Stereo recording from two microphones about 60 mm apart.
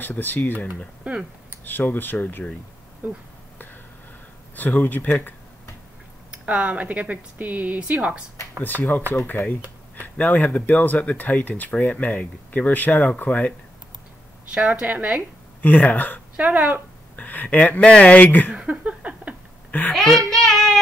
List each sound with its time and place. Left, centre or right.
0.0 s speech: left
1.6 s speech: left
4.6 s speech: left
6.3 s speech: right
8.5 s speech: left
14.5 s speech: right
15.6 s speech: left
16.3 s speech: right
17.1 s speech: left
18.5 s a sound: centre
19.9 s child singing: centre